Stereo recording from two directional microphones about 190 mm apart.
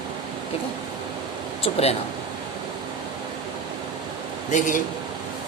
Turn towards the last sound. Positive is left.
turn(degrees=45)  # may be behind; listen again after turning